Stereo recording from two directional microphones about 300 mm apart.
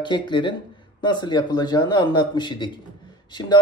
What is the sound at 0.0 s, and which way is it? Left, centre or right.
Speech, centre.